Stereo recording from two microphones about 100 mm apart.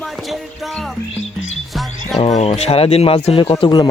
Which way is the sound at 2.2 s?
90° left.